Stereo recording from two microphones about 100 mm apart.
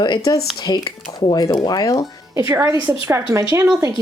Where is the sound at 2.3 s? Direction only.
35° right (ahead or behind).